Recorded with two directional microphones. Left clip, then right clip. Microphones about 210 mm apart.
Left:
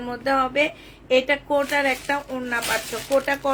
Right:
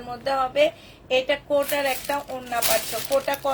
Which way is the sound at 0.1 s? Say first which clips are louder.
Left 2 dB; 40° left (ahead or behind).